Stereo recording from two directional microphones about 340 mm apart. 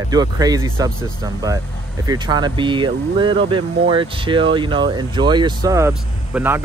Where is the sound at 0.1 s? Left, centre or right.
Centre.